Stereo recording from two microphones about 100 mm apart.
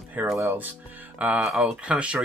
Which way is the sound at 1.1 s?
15° right (ahead or behind).